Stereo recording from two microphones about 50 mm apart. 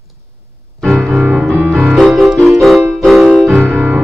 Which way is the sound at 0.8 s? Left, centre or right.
Centre.